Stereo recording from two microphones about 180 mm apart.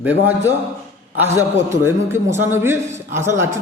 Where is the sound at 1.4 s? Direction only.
15° right (ahead or behind).